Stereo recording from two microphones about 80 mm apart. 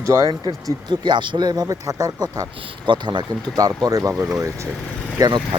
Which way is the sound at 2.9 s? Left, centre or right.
Right.